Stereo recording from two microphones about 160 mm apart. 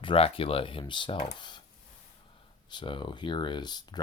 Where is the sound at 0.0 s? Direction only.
35° left (ahead or behind).